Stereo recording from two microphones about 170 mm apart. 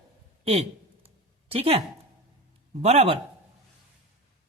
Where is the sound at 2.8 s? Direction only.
40° right (ahead or behind).